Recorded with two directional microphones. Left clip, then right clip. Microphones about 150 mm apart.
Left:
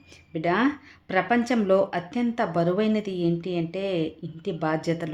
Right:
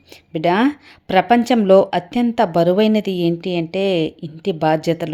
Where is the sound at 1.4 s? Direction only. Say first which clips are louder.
Right 8 dB; 30° right (ahead or behind).